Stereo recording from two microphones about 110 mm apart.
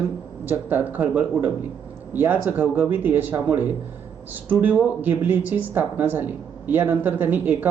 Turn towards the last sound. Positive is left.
turn(degrees=-15)  # may be behind; listen again after turning